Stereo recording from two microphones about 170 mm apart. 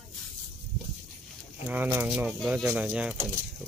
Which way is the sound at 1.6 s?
10° right (ahead or behind).